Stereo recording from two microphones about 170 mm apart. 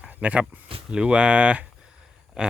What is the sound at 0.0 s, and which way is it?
Speech, 10° right (ahead or behind).